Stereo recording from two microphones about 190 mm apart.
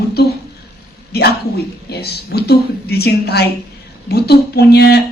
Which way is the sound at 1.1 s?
55° left (ahead or behind).